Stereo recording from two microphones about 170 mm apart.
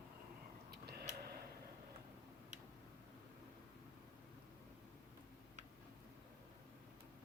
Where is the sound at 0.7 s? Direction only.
70° right (ahead or behind).